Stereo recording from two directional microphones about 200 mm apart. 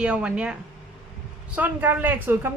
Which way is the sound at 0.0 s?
5° right (ahead or behind).